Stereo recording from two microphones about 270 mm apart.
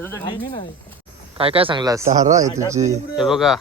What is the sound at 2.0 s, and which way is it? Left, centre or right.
Speech, right.